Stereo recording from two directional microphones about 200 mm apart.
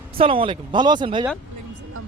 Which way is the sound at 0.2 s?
25° right (ahead or behind).